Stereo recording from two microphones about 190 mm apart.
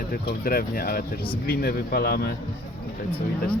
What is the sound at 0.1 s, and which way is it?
Speech, 50° left (ahead or behind).